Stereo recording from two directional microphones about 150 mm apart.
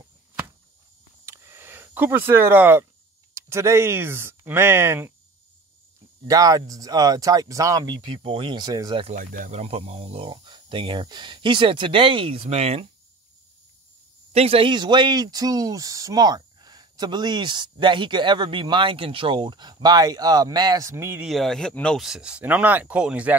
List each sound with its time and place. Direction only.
1.2 s a sound: 15° right (ahead or behind)
3.3 s speech: 20° right (ahead or behind)
6.2 s a man's voice: 25° right (ahead or behind)
9.1 s speech: 65° right (ahead or behind); by 12.9 s 45° right (ahead or behind)
14.3 s a man's voice: 40° right (ahead or behind); by 21.3 s 15° right (ahead or behind)
21.3 s speech: 5° left (ahead or behind)